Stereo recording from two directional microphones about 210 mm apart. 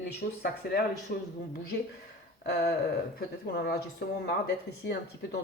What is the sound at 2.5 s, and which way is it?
Speech, 50° left (ahead or behind).